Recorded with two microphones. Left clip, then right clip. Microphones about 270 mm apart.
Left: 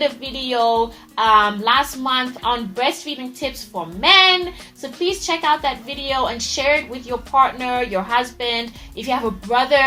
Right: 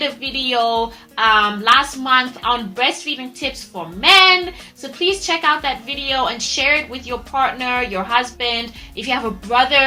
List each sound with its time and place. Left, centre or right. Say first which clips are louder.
0.0 s a woman's voice: right 1 dB; left